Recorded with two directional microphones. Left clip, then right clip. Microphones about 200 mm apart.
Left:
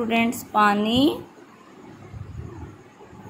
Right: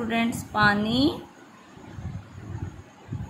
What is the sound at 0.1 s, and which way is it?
A woman's voice, 10° left (ahead or behind).